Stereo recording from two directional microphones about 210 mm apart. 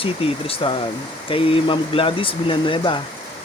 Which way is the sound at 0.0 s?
25° left (ahead or behind).